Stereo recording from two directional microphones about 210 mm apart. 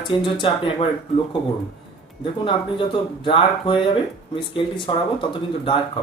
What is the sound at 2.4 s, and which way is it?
Speech, 25° left (ahead or behind).